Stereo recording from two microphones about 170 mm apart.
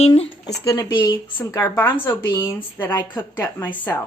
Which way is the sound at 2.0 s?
10° left (ahead or behind).